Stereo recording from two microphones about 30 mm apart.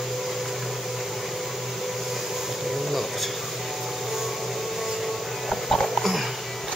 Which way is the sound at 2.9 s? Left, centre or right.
Centre.